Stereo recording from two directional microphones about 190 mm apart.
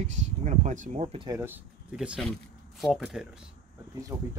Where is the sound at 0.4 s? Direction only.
40° right (ahead or behind).